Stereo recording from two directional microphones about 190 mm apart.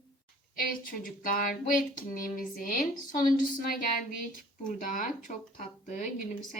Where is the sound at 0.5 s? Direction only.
50° left (ahead or behind).